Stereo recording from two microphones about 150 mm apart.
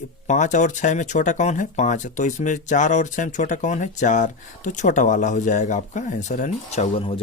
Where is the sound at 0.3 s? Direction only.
55° left (ahead or behind).